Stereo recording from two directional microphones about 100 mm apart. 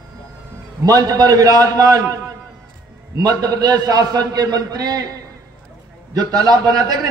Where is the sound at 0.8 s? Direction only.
40° right (ahead or behind).